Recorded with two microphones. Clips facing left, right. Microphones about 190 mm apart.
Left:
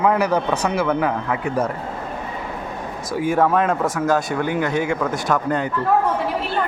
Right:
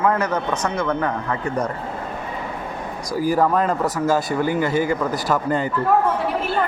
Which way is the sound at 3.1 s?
Centre (ahead or behind).